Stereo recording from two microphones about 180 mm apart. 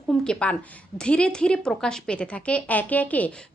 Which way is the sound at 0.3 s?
5° left (ahead or behind).